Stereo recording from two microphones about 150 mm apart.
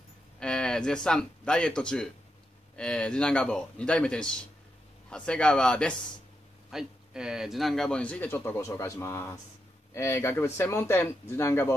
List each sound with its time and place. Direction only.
0.4 s speech: 5° left (ahead or behind)